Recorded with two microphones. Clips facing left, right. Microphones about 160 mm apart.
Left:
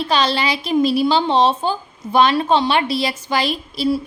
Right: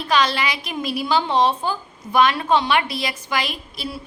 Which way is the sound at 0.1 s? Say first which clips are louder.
Even; 30° left (ahead or behind).